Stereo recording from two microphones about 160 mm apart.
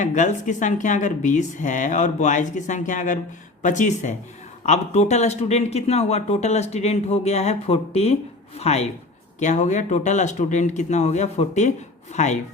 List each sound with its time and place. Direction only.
0.0 s speech: 50° left (ahead or behind)